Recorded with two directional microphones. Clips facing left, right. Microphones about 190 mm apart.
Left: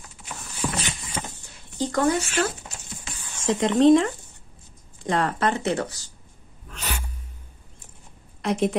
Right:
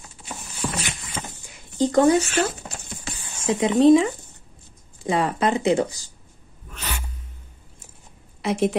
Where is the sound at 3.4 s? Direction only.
5° right (ahead or behind).